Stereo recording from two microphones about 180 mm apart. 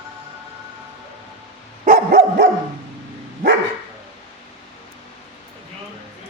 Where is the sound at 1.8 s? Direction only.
50° right (ahead or behind).